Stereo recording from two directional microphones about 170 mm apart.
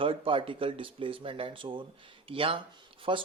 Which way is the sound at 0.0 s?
30° right (ahead or behind).